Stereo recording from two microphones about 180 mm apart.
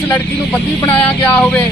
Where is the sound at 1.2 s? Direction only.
10° left (ahead or behind).